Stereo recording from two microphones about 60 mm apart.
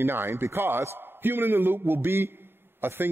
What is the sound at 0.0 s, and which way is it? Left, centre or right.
A man's voice, right.